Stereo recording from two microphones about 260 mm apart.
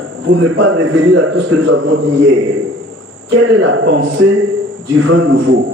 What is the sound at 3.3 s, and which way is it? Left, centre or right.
A man's voice, right.